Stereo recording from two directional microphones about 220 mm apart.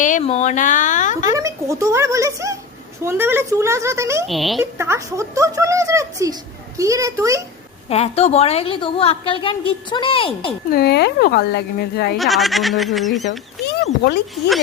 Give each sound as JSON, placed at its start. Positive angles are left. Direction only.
{"t": 0.0, "sound": "speech", "side_deg": 30}
{"t": 1.3, "sound": "speech", "side_deg": -15}
{"t": 4.3, "sound": "speech", "side_deg": 0}
{"t": 4.6, "sound": "speech", "side_deg": -10}
{"t": 7.9, "sound": "a woman's voice", "side_deg": 25}
{"t": 10.7, "sound": "speech", "side_deg": 45}
{"t": 12.1, "sound": "speech", "side_deg": 0}